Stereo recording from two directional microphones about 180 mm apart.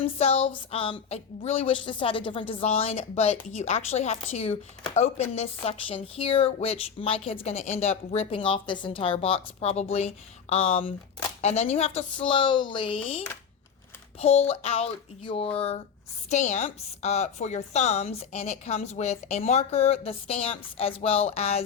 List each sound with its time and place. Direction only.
0.0 s a woman's voice: 35° left (ahead or behind)